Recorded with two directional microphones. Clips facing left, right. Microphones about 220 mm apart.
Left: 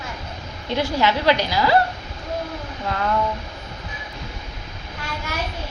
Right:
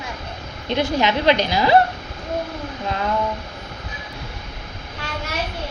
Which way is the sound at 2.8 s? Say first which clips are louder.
Even; 20° right (ahead or behind).